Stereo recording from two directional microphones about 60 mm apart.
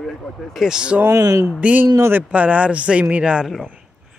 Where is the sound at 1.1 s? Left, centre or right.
Right.